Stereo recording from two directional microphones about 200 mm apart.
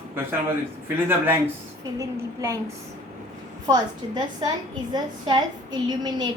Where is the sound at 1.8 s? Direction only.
15° right (ahead or behind).